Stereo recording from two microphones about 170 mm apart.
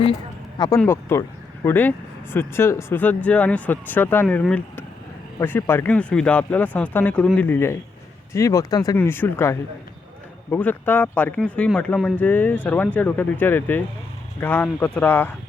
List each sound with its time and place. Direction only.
0.8 s speech: 15° left (ahead or behind)